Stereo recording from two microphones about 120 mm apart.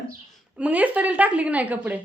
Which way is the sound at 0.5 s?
10° right (ahead or behind).